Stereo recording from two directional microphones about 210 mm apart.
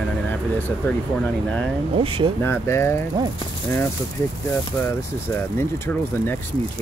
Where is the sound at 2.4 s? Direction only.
10° left (ahead or behind).